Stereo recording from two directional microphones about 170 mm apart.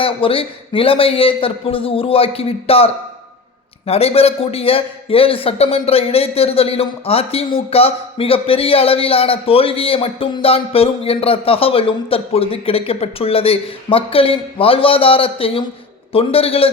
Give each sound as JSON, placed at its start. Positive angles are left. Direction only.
{"t": 0.0, "sound": "a man's voice", "side_deg": 30}